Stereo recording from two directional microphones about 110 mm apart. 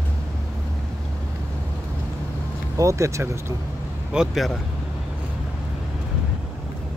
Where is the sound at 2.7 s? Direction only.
30° right (ahead or behind).